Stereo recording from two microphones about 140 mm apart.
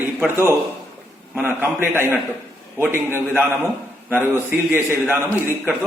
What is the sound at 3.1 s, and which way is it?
A man's voice, 15° right (ahead or behind).